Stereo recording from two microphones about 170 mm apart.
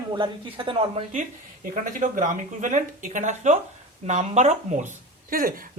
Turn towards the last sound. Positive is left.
turn(degrees=-55)  # may be behind; listen again after turning